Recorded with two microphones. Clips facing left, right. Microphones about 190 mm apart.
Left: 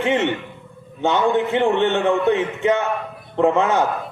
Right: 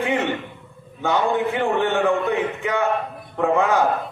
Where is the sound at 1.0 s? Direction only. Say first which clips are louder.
Left 2 dB; 25° left (ahead or behind).